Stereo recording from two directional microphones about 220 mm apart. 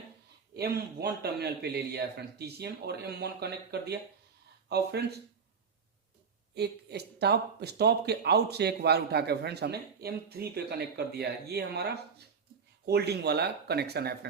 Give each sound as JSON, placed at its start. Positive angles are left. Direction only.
{"t": 0.5, "sound": "speech", "side_deg": -45}
{"t": 6.5, "sound": "speech", "side_deg": -50}